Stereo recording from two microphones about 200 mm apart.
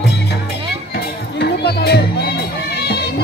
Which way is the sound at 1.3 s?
55° left (ahead or behind).